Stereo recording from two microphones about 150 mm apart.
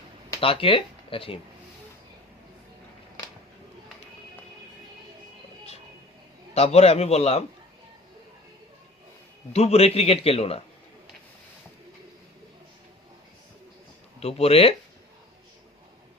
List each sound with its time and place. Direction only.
0.3 s speech: 35° left (ahead or behind)
6.5 s a man's voice: 45° left (ahead or behind)
9.5 s a man's voice: 45° left (ahead or behind)
14.2 s speech: 40° left (ahead or behind)